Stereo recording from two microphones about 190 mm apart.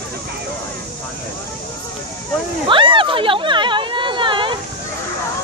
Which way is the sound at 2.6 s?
25° right (ahead or behind).